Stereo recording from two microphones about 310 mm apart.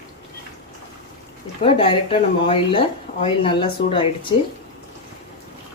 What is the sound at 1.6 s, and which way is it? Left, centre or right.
Speech, centre.